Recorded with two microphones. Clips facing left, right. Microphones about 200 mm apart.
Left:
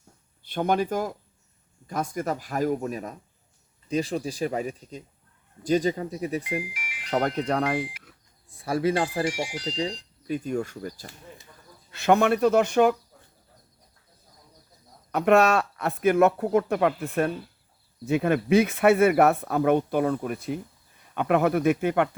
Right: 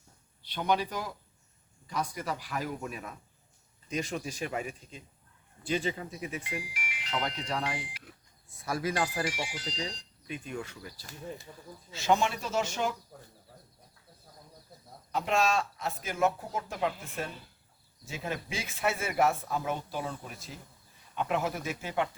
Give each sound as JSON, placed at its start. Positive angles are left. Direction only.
{"t": 0.4, "sound": "speech", "side_deg": 50}
{"t": 7.1, "sound": "speech", "side_deg": 55}
{"t": 8.6, "sound": "speech", "side_deg": 30}
{"t": 11.9, "sound": "speech", "side_deg": 60}
{"t": 15.1, "sound": "speech", "side_deg": 65}